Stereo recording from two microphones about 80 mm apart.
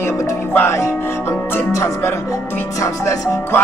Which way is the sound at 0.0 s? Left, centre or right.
Left.